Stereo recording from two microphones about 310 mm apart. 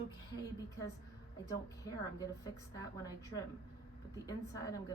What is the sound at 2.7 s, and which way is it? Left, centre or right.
A woman's voice, centre.